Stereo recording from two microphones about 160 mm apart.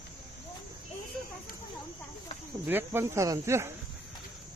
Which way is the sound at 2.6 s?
15° right (ahead or behind).